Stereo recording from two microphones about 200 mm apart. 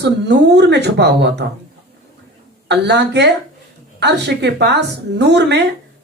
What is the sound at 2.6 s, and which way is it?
Speech, 60° right (ahead or behind).